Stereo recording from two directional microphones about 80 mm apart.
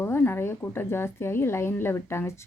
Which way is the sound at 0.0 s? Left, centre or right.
Left.